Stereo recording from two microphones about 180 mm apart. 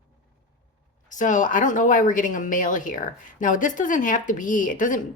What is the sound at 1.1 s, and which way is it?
Speech, 45° left (ahead or behind).